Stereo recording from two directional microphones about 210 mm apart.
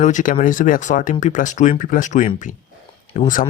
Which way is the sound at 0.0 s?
35° left (ahead or behind).